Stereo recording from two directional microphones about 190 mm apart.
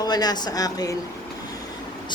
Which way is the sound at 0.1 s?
20° left (ahead or behind).